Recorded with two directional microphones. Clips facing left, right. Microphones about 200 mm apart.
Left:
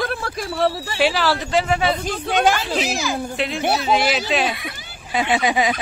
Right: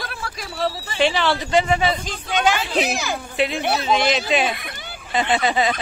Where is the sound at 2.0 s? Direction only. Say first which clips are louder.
Left 4 dB; 60° left (ahead or behind).